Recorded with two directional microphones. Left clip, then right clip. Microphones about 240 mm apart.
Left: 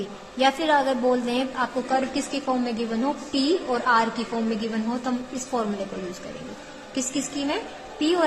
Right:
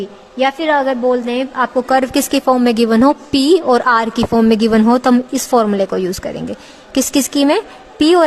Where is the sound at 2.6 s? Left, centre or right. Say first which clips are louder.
Right 15 dB; right.